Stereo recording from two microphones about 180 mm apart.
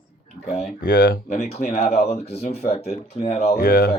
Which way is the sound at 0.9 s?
55° left (ahead or behind).